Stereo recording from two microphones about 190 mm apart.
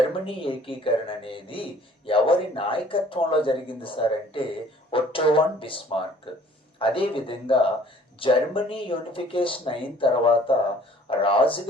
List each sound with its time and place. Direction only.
0.3 s speech: 30° left (ahead or behind)